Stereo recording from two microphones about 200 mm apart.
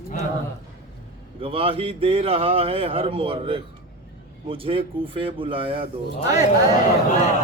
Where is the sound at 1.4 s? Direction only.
25° right (ahead or behind).